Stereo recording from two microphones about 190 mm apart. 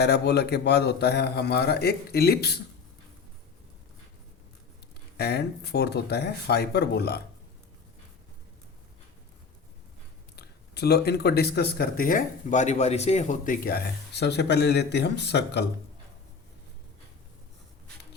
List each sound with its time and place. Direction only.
0.0 s speech: 60° left (ahead or behind)
5.1 s speech: 60° left (ahead or behind)
10.3 s speech: 60° left (ahead or behind)